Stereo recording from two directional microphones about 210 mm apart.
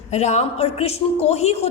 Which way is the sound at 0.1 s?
30° left (ahead or behind).